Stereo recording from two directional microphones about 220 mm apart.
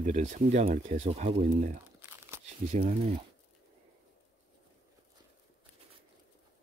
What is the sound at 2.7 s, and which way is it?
Speech, 35° right (ahead or behind).